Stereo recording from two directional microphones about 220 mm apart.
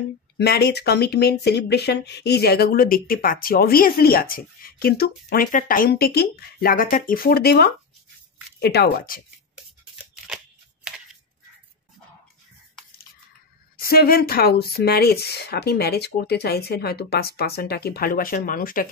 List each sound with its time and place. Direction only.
0.4 s speech: 45° left (ahead or behind)
10.2 s a sound: 5° right (ahead or behind)
13.7 s speech: 40° left (ahead or behind)